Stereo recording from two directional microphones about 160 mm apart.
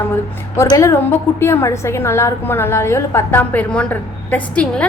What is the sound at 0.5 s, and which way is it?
A woman's voice, 20° left (ahead or behind).